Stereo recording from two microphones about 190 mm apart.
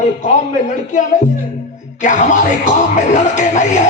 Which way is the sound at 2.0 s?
40° left (ahead or behind).